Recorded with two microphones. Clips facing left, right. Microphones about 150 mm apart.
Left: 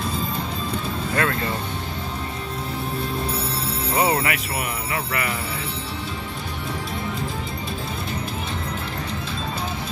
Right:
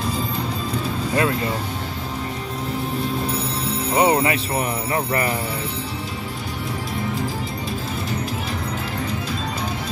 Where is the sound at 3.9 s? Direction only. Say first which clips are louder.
Right 4 dB; 30° right (ahead or behind).